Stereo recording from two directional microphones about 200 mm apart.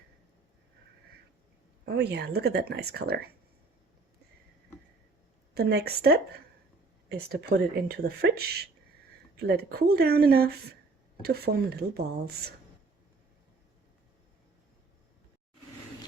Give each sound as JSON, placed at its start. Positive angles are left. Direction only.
{"t": 1.8, "sound": "a woman's voice", "side_deg": -55}
{"t": 5.5, "sound": "a woman's voice", "side_deg": -55}